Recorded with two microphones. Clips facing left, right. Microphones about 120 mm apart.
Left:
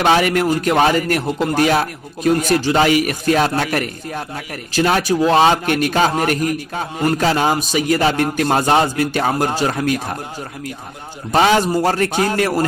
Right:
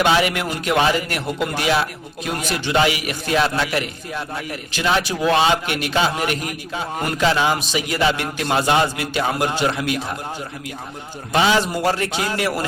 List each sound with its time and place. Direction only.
0.0 s a man's voice: 45° left (ahead or behind)
11.3 s a man's voice: 45° left (ahead or behind)